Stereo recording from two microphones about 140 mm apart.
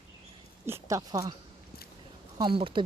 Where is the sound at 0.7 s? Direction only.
20° right (ahead or behind).